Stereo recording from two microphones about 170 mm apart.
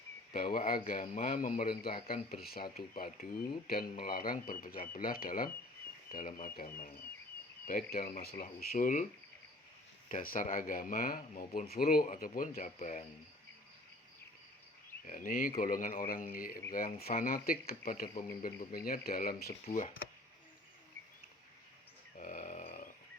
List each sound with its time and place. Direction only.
0.3 s speech: 55° left (ahead or behind)
2.0 s speech: 65° left (ahead or behind)
10.1 s speech: 55° left (ahead or behind)
12.5 s speech: 45° left (ahead or behind)
15.0 s speech: 55° left (ahead or behind)
19.6 s speech: 40° left (ahead or behind)
22.2 s a sound: 50° left (ahead or behind)